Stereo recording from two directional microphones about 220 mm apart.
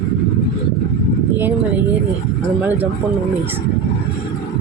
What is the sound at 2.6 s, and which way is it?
Speech, 5° right (ahead or behind).